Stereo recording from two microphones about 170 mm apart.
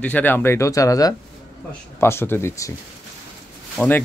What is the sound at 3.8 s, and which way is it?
Speech, 10° left (ahead or behind).